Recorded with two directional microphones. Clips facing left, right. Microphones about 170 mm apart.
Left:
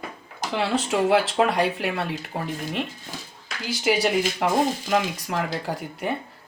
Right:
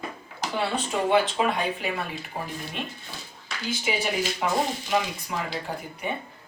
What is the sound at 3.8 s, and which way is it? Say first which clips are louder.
Speech: left 8 dB; 80° left.